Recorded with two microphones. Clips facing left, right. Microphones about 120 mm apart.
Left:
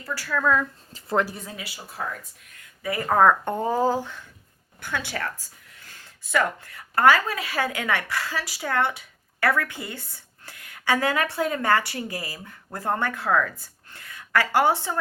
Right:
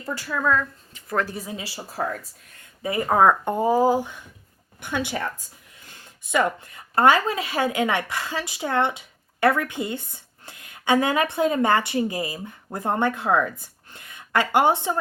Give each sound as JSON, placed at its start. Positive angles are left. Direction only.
{"t": 0.0, "sound": "speech", "side_deg": -20}
{"t": 1.5, "sound": "speech", "side_deg": -30}
{"t": 2.6, "sound": "a sound", "side_deg": -25}
{"t": 3.1, "sound": "speech", "side_deg": -10}